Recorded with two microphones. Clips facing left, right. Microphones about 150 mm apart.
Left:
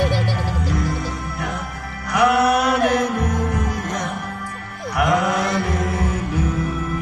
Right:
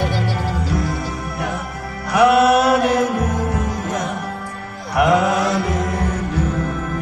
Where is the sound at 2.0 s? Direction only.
25° right (ahead or behind).